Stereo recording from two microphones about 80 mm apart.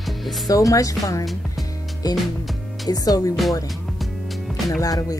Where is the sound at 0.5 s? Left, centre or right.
Left.